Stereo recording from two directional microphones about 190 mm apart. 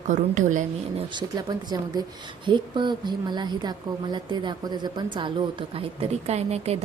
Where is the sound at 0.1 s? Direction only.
40° right (ahead or behind).